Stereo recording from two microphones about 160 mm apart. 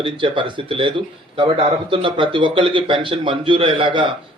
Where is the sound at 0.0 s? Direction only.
30° right (ahead or behind).